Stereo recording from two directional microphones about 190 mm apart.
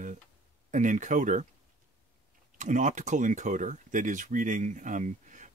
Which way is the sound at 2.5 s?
40° right (ahead or behind).